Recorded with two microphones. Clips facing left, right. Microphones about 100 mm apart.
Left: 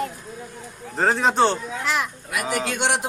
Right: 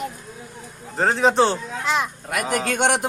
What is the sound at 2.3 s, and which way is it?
Speech, 50° right (ahead or behind).